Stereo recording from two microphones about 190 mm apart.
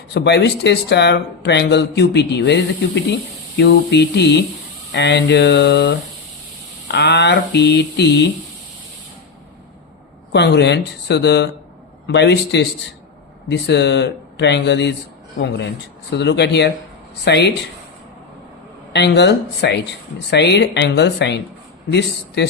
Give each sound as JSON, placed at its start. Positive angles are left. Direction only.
{"t": 0.1, "sound": "speech", "side_deg": 60}
{"t": 10.3, "sound": "speech", "side_deg": 65}
{"t": 16.1, "sound": "speech", "side_deg": 65}
{"t": 18.9, "sound": "speech", "side_deg": 65}